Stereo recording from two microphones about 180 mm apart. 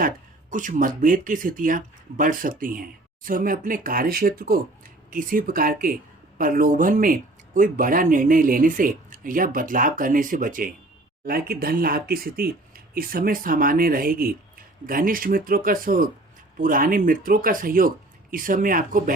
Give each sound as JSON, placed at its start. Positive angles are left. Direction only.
{"t": 0.5, "sound": "speech", "side_deg": -45}